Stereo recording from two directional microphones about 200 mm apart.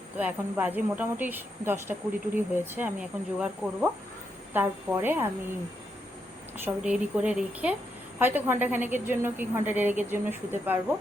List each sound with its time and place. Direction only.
0.2 s speech: 10° right (ahead or behind)
6.8 s speech: 5° right (ahead or behind)